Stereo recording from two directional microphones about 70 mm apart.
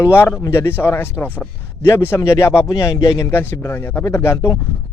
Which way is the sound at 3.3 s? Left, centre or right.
Left.